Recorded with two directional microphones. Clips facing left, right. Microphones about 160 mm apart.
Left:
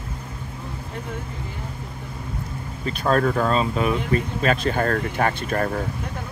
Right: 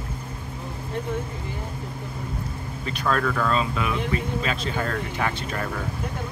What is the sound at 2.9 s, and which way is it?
Speech, 40° left (ahead or behind).